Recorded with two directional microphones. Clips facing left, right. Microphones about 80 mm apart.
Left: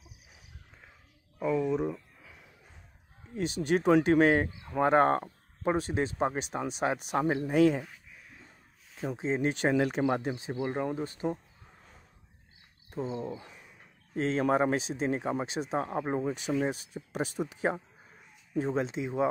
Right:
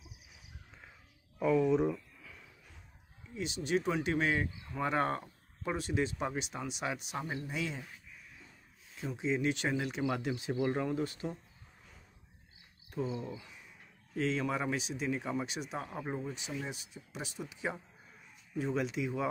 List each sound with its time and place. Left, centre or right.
1.4 s speech: centre
1.9 s a sound: centre
3.3 s speech: left
8.9 s speech: left
12.9 s speech: left
16.2 s speech: left